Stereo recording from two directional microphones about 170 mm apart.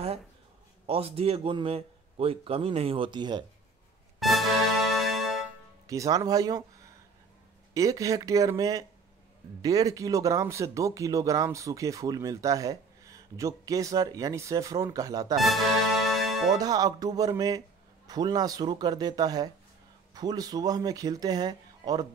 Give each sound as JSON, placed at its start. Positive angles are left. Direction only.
{"t": 0.8, "sound": "a man's voice", "side_deg": -35}
{"t": 4.2, "sound": "music", "side_deg": 0}
{"t": 5.9, "sound": "speech", "side_deg": -20}
{"t": 15.3, "sound": "speech", "side_deg": 0}
{"t": 16.5, "sound": "speech", "side_deg": -20}